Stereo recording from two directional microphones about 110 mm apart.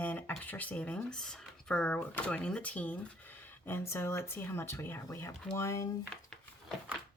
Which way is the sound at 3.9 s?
25° left (ahead or behind).